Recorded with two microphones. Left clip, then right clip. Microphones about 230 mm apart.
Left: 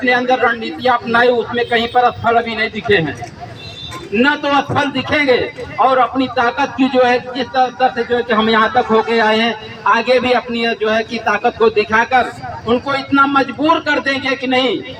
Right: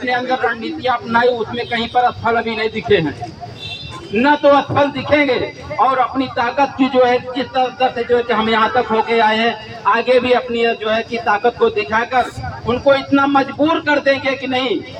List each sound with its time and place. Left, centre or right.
0.0 s a man's voice: left
4.2 s a man's voice: left